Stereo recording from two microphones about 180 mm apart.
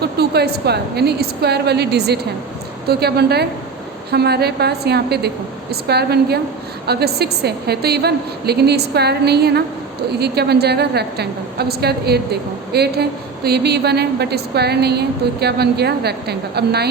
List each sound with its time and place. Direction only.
0.0 s a woman's voice: 65° right (ahead or behind)